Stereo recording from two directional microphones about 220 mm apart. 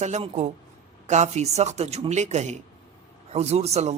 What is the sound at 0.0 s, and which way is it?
A man's voice, 30° right (ahead or behind).